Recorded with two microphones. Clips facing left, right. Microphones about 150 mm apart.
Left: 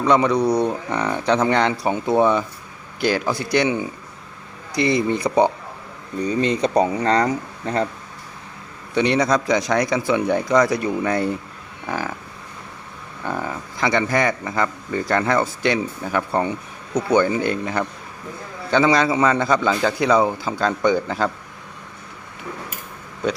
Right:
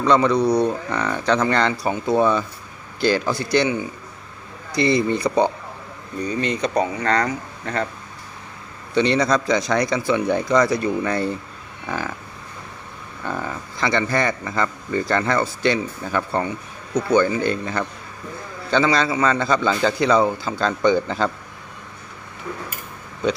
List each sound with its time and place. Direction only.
0.0 s speech: 15° left (ahead or behind)
6.2 s speech: 30° left (ahead or behind)
9.0 s speech: 15° left (ahead or behind)
13.2 s speech: 10° left (ahead or behind)